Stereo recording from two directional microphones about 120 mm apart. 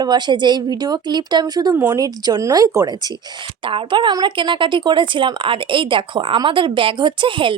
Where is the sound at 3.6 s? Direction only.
45° right (ahead or behind).